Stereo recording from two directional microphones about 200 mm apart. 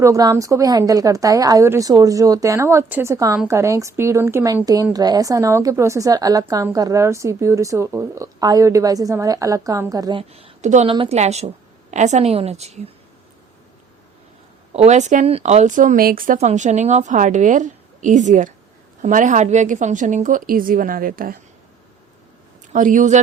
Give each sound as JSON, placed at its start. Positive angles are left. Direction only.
{"t": 0.0, "sound": "a woman's voice", "side_deg": -15}
{"t": 14.7, "sound": "speech", "side_deg": -35}
{"t": 22.7, "sound": "speech", "side_deg": -40}